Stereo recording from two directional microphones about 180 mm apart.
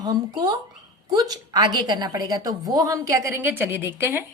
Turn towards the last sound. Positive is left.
turn(degrees=-10)  # may be behind; listen again after turning